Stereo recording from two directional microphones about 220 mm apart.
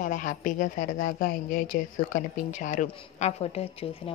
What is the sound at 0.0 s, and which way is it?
A woman's voice, 35° left (ahead or behind).